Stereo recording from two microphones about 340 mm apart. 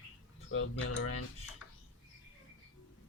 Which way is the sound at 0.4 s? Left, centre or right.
Left.